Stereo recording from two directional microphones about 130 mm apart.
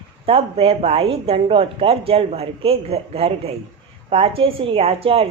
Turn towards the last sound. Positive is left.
turn(degrees=-50)  # may be behind; listen again after turning